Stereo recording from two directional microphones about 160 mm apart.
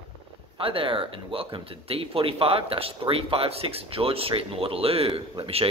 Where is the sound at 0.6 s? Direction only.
35° right (ahead or behind).